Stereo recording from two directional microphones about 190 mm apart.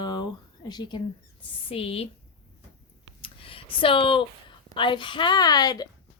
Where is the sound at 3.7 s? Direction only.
25° left (ahead or behind).